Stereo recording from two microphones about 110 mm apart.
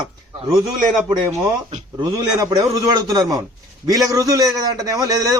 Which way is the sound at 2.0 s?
40° right (ahead or behind).